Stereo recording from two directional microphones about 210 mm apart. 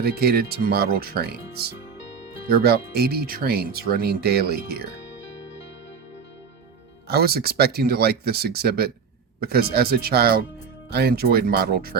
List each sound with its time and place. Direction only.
0.0 s speech: 45° right (ahead or behind)
7.1 s speech: 45° right (ahead or behind)